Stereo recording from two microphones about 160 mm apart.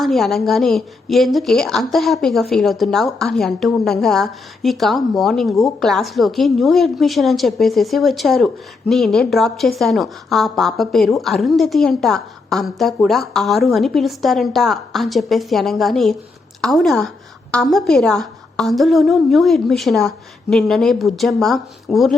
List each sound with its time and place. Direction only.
0.0 s a woman's voice: centre (ahead or behind)